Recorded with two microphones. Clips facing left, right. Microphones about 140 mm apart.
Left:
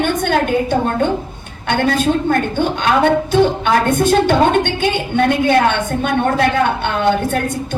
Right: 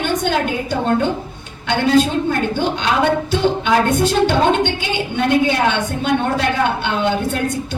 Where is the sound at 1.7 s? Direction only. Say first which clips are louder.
Right 1 dB; 50° left (ahead or behind).